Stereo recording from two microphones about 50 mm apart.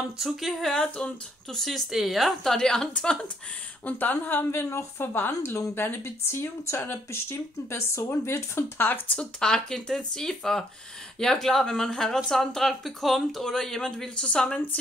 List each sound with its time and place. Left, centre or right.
0.2 s a woman's voice: centre
3.8 s speech: left
4.5 s speech: left
5.1 s a woman's voice: left
9.1 s speech: centre